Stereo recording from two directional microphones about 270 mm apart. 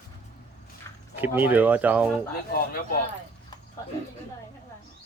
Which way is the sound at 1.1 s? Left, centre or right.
Centre.